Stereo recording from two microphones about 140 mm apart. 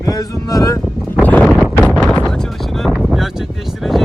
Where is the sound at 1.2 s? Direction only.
10° left (ahead or behind).